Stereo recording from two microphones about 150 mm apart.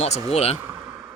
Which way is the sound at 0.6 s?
20° right (ahead or behind).